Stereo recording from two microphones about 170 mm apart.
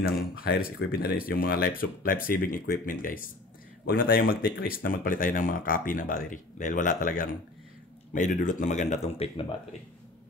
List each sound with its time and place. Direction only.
0.4 s speech: 60° left (ahead or behind); by 9.5 s 35° left (ahead or behind)